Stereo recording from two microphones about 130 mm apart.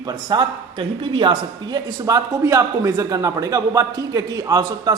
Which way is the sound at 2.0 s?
25° right (ahead or behind).